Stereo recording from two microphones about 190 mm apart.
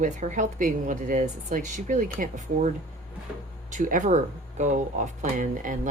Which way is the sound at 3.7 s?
40° right (ahead or behind).